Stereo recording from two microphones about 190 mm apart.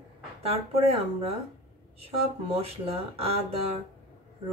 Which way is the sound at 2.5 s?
30° right (ahead or behind).